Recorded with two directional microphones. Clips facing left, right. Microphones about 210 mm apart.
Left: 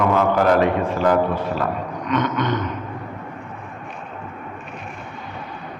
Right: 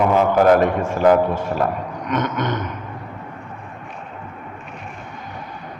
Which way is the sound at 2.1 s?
45° right (ahead or behind).